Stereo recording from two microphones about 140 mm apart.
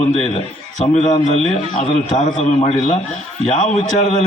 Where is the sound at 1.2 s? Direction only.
55° left (ahead or behind).